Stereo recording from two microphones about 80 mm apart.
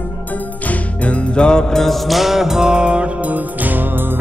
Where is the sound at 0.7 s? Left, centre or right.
Centre.